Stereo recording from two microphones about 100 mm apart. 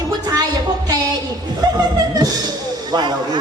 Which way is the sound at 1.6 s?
40° right (ahead or behind).